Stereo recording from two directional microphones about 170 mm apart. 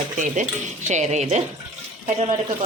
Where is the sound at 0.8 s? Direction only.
45° right (ahead or behind).